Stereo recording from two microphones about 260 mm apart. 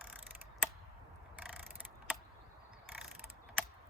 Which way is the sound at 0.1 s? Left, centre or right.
Centre.